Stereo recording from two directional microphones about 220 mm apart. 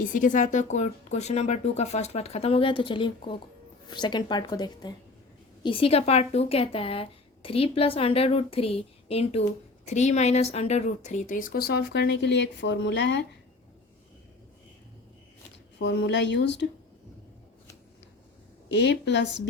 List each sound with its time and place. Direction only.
0.0 s speech: 35° left (ahead or behind); by 13.2 s 55° left (ahead or behind)
15.8 s speech: 55° left (ahead or behind)
18.7 s speech: 50° left (ahead or behind)